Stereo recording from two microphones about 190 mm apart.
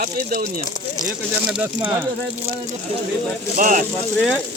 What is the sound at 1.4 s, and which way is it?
Speech, 5° right (ahead or behind).